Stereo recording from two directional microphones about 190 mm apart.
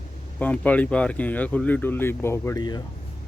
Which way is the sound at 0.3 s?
10° left (ahead or behind).